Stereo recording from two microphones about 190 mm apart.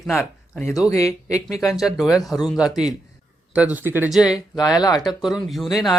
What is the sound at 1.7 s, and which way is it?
Speech, centre (ahead or behind).